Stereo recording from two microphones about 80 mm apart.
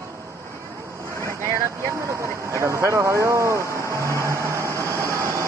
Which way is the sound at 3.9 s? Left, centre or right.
Right.